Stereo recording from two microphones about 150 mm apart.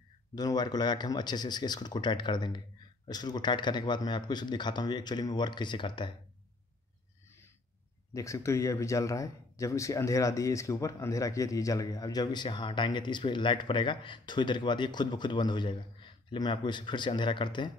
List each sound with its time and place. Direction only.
0.3 s speech: 25° left (ahead or behind)
8.1 s speech: 20° left (ahead or behind)